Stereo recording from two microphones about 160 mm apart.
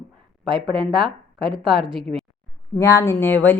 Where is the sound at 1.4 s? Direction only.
30° right (ahead or behind).